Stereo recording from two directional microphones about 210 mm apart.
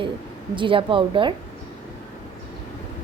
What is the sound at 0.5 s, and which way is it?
Speech, 25° right (ahead or behind).